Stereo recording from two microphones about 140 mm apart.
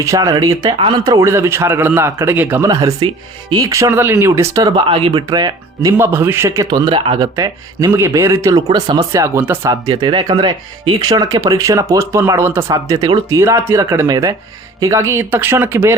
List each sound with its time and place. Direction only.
0.0 s a man's voice: 20° right (ahead or behind)
2.6 s speech: 25° right (ahead or behind)
4.7 s speech: 40° right (ahead or behind)
6.0 s a man's voice: 15° right (ahead or behind)
6.7 s a man's voice: 30° right (ahead or behind)